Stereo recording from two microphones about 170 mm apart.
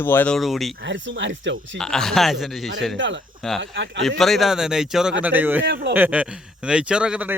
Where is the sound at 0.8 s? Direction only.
90° right.